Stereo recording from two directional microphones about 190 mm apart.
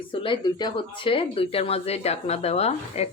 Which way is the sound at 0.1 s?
25° left (ahead or behind).